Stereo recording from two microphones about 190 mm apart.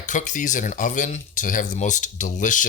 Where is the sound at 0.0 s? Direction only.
40° left (ahead or behind).